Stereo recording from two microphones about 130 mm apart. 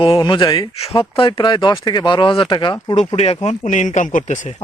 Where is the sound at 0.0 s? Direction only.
40° left (ahead or behind).